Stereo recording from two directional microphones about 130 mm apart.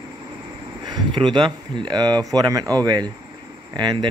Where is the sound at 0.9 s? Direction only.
35° right (ahead or behind).